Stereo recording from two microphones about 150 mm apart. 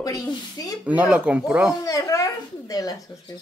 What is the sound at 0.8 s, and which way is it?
Speech, 10° right (ahead or behind).